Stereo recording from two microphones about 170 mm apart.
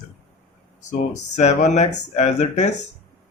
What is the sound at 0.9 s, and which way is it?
Speech, 45° left (ahead or behind).